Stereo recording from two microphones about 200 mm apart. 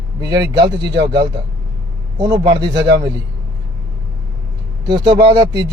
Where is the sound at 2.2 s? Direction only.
20° right (ahead or behind).